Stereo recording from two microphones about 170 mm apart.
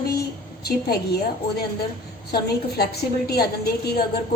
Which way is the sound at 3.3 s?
70° left (ahead or behind).